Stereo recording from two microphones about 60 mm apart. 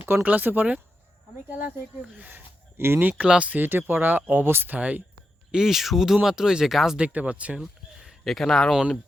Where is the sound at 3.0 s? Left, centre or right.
Right.